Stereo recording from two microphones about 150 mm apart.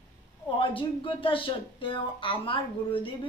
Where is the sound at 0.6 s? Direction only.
35° left (ahead or behind).